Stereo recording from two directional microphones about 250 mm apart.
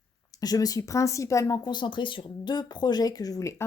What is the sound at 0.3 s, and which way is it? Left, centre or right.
Speech, centre.